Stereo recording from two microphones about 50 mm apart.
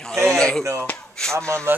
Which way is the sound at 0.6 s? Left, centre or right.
Right.